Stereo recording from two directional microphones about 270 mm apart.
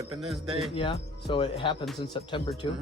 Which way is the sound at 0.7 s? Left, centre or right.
Left.